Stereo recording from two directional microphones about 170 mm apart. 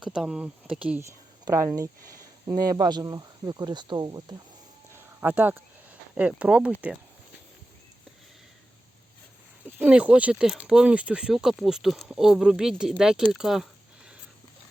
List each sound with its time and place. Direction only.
0.0 s speech: 5° right (ahead or behind)
1.5 s speech: 20° right (ahead or behind)
4.9 s a sound: 10° right (ahead or behind)
6.1 s speech: 5° right (ahead or behind)
9.6 s speech: 10° right (ahead or behind)